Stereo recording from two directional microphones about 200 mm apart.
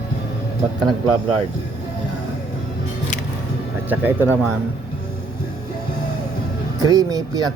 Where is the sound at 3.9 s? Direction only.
10° right (ahead or behind).